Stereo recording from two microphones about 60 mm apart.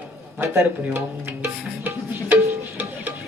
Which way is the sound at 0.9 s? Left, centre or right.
Right.